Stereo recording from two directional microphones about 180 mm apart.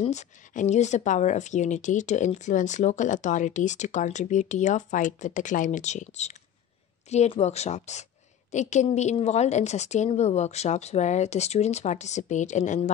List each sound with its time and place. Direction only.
0.0 s a woman's voice: 40° left (ahead or behind)